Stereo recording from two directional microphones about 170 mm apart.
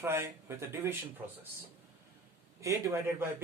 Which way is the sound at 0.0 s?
15° right (ahead or behind).